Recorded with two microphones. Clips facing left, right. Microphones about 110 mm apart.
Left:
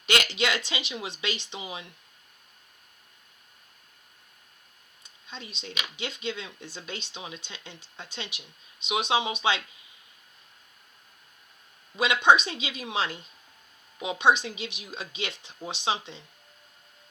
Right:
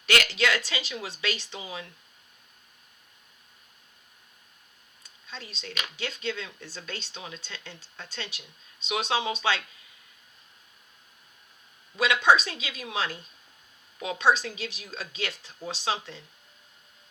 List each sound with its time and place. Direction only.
0.0 s speech: 20° left (ahead or behind)
5.0 s a sound: 20° left (ahead or behind)
6.0 s speech: 15° left (ahead or behind)
11.9 s speech: 20° left (ahead or behind)